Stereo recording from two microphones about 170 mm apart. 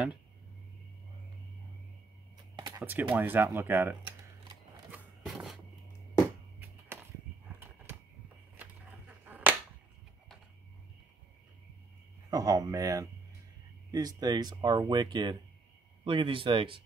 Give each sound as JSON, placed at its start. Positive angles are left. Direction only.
{"t": 2.8, "sound": "speech", "side_deg": -10}
{"t": 4.9, "sound": "music", "side_deg": 0}
{"t": 9.3, "sound": "finger snapping", "side_deg": -10}
{"t": 12.3, "sound": "speech", "side_deg": -20}